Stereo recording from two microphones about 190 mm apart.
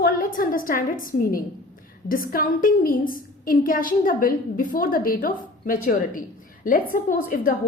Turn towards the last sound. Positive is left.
turn(degrees=45)  # may be behind; listen again after turning